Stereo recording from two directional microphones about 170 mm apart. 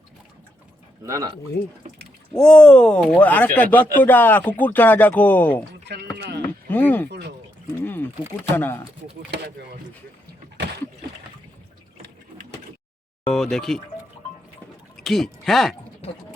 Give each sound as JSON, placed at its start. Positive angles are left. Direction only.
{"t": 1.0, "sound": "speech", "side_deg": -20}
{"t": 2.4, "sound": "speech", "side_deg": 5}
{"t": 5.8, "sound": "a sound", "side_deg": -80}
{"t": 6.7, "sound": "speech", "side_deg": 10}
{"t": 7.1, "sound": "speech", "side_deg": -80}
{"t": 8.4, "sound": "speech", "side_deg": 10}
{"t": 13.2, "sound": "speech", "side_deg": 0}
{"t": 14.9, "sound": "speech", "side_deg": 0}